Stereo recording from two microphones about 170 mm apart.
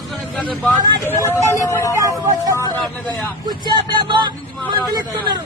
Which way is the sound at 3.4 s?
25° right (ahead or behind).